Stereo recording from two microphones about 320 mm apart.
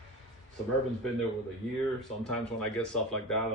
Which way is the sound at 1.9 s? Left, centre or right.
Centre.